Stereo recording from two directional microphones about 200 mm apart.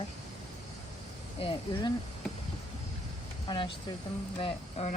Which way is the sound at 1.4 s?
25° left (ahead or behind).